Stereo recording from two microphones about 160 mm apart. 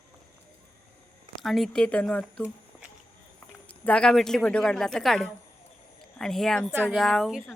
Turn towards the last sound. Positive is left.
turn(degrees=0)  # may be behind; listen again after turning